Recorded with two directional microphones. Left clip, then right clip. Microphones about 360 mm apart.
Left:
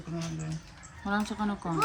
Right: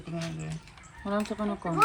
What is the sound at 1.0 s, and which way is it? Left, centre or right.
Speech, centre.